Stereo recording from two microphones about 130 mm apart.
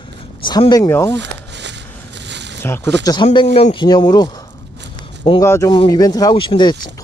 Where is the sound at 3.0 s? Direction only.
30° left (ahead or behind).